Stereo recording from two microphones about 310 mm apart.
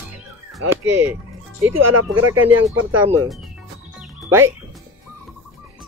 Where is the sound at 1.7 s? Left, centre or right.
Right.